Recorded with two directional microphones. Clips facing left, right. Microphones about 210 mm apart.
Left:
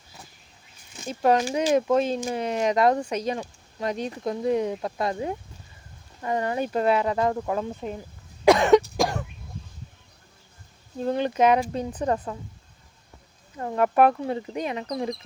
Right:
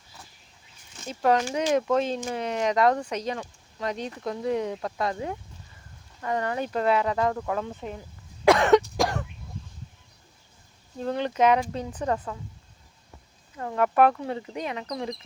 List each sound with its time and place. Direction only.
1.3 s speech: 10° left (ahead or behind)
5.0 s speech: 25° left (ahead or behind)
8.4 s cough: 15° left (ahead or behind)
11.0 s speech: 15° left (ahead or behind)
11.9 s speech: 30° left (ahead or behind)
13.6 s speech: 25° left (ahead or behind)